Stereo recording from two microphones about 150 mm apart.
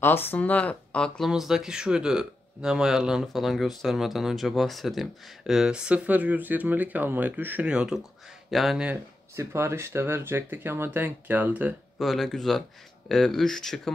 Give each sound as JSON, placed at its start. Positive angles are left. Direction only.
{"t": 0.0, "sound": "speech", "side_deg": 15}
{"t": 9.3, "sound": "speech", "side_deg": -20}
{"t": 12.0, "sound": "speech", "side_deg": 0}